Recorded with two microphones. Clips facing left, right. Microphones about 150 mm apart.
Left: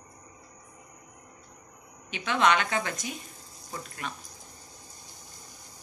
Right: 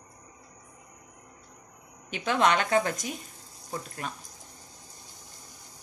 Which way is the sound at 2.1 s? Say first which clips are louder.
Even; 45° right (ahead or behind).